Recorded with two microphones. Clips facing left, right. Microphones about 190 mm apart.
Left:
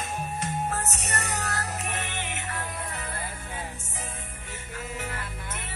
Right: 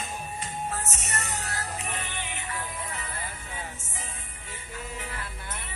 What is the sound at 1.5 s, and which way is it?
Music, 70° left (ahead or behind).